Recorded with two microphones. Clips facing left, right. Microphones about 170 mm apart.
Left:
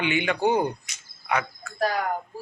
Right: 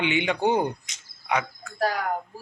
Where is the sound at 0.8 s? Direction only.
20° right (ahead or behind).